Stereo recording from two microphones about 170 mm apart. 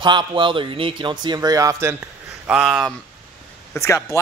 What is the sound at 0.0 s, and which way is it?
A man's voice, 25° right (ahead or behind).